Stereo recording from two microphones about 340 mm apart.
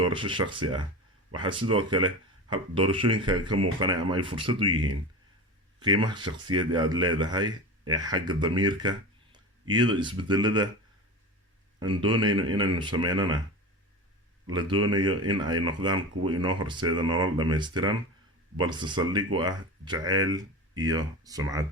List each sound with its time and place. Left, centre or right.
0.0 s speech: centre
11.8 s speech: centre
14.5 s speech: centre